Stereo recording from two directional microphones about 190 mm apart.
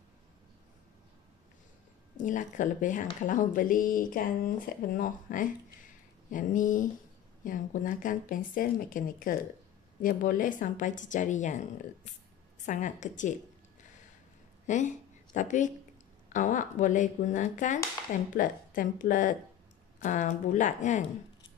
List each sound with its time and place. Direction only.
2.1 s speech: 40° left (ahead or behind)
12.6 s speech: 40° left (ahead or behind)
14.7 s speech: 40° left (ahead or behind)